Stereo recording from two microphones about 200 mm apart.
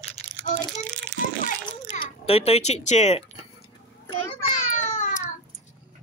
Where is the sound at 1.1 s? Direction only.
15° right (ahead or behind).